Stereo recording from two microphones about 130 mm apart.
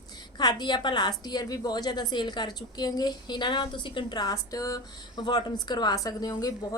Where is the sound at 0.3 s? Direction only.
35° left (ahead or behind).